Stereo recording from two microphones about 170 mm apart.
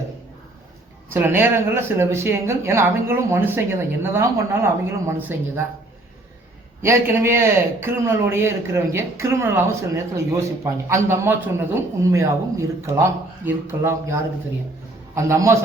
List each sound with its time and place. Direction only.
1.1 s a man's voice: 10° right (ahead or behind)
6.8 s a man's voice: 15° right (ahead or behind)